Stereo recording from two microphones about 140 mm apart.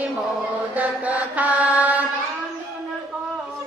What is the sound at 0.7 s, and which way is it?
Mantra, 10° right (ahead or behind).